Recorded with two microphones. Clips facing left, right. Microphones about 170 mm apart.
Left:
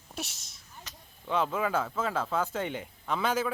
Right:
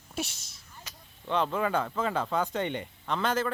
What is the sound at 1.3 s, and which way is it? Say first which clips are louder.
Speech: right 1 dB; 5° left (ahead or behind).